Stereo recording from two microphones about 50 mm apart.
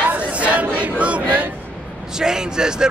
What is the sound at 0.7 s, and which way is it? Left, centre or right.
Speech, right.